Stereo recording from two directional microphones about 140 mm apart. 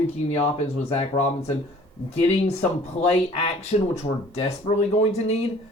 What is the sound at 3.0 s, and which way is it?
Speech, 50° left (ahead or behind).